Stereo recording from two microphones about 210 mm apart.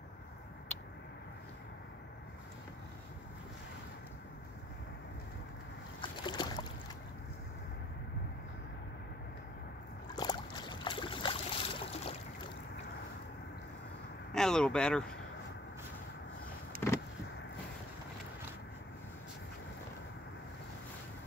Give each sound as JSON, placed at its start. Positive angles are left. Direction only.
{"t": 5.9, "sound": "boat", "side_deg": 20}
{"t": 10.0, "sound": "boat", "side_deg": 20}
{"t": 14.3, "sound": "speech", "side_deg": 5}
{"t": 16.7, "sound": "vehicle", "side_deg": -45}